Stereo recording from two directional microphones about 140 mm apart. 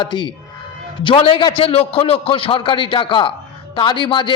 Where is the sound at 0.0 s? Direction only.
35° left (ahead or behind).